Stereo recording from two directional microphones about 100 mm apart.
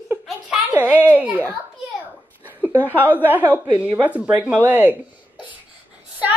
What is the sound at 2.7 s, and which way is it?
A woman's voice, 20° right (ahead or behind).